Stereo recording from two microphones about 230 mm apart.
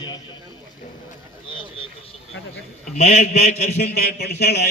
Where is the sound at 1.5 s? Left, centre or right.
Left.